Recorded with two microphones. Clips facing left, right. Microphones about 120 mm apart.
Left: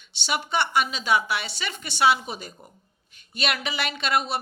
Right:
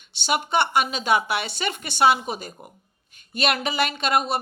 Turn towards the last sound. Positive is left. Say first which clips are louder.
# right 3 dB
turn(degrees=-45)  # may be behind; listen again after turning